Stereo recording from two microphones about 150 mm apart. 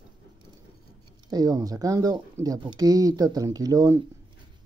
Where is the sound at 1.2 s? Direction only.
25° right (ahead or behind).